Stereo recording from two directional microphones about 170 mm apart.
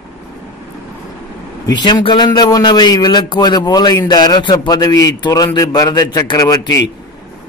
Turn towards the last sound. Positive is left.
turn(degrees=20)  # may be behind; listen again after turning